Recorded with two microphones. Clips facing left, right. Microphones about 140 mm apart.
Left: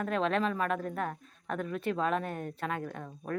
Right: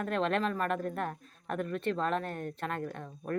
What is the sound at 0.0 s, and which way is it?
Speech, centre (ahead or behind).